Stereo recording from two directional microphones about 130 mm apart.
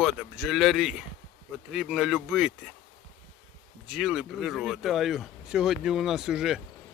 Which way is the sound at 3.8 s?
Centre (ahead or behind).